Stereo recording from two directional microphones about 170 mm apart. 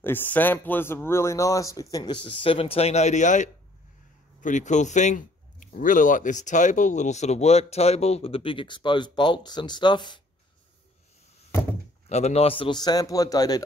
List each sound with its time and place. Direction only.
0.0 s speech: 10° left (ahead or behind)
12.1 s speech: 40° left (ahead or behind); by 13.6 s 20° left (ahead or behind)